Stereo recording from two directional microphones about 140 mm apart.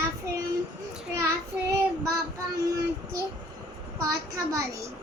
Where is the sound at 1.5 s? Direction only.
10° right (ahead or behind).